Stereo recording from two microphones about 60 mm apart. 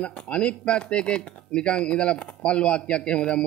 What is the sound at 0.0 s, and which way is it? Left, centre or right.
Speech, centre.